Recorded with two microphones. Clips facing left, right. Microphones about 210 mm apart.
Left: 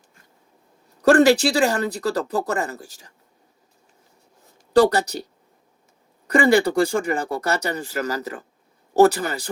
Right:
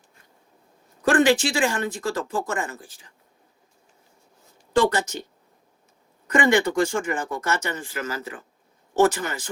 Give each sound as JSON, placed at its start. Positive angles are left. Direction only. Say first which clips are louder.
{"t": 1.0, "sound": "speech", "louder": "left 4 dB", "side_deg": 40}
{"t": 4.7, "sound": "speech", "louder": "left 5 dB", "side_deg": 35}
{"t": 6.2, "sound": "speech", "louder": "left 3 dB", "side_deg": 35}